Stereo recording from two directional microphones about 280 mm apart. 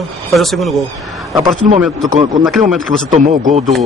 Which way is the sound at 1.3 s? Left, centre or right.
Centre.